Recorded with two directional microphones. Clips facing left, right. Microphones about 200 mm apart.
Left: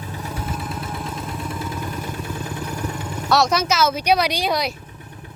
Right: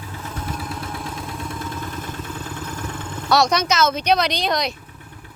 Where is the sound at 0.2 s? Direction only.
15° left (ahead or behind).